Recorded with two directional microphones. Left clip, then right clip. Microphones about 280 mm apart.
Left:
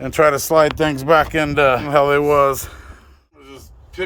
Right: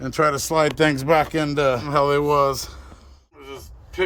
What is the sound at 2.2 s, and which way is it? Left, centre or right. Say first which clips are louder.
Speech: left 4 dB; left.